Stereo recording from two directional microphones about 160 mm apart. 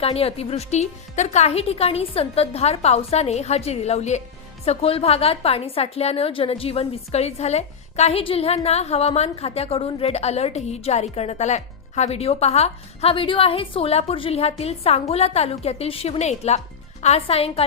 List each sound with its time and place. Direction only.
0.0 s a woman's voice: 40° left (ahead or behind)